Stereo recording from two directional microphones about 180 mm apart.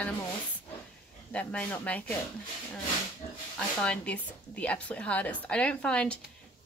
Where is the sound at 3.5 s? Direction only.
5° left (ahead or behind).